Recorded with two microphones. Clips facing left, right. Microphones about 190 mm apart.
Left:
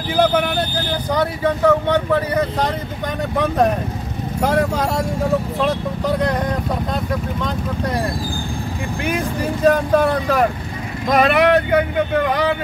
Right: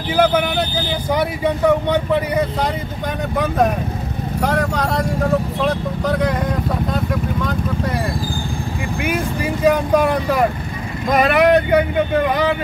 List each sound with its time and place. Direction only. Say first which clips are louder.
0.1 s speech: right 1 dB; 5° right (ahead or behind)
4.4 s speech: left 2 dB; 5° left (ahead or behind)
9.0 s speech: even; 10° right (ahead or behind)